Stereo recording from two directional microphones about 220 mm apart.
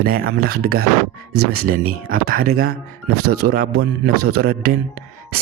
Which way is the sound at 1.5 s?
40° right (ahead or behind).